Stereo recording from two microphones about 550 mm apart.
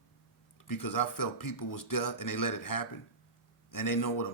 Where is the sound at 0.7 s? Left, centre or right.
Left.